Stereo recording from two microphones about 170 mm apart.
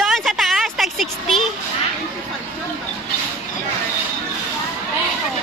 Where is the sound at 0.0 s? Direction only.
Centre (ahead or behind).